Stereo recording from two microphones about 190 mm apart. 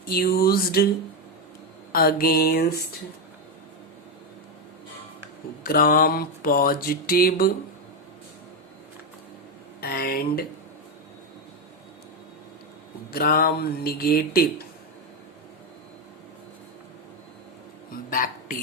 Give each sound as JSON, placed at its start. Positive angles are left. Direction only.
{"t": 0.1, "sound": "mantra", "side_deg": 50}
{"t": 1.9, "sound": "mantra", "side_deg": 50}
{"t": 5.6, "sound": "mantra", "side_deg": 50}
{"t": 9.8, "sound": "speech", "side_deg": 50}
{"t": 13.1, "sound": "mantra", "side_deg": 50}
{"t": 18.1, "sound": "a woman's voice", "side_deg": 50}